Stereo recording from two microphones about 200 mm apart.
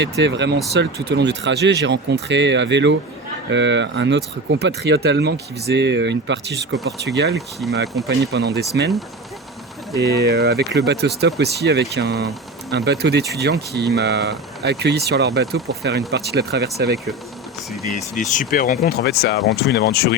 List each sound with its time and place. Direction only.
0.0 s speech: 60° right (ahead or behind)
10.0 s speech: 55° right (ahead or behind)
17.9 s speech: 40° left (ahead or behind)
18.9 s speech: 55° left (ahead or behind)